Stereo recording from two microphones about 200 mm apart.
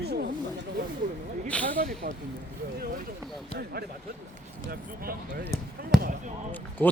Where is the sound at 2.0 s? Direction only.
45° right (ahead or behind).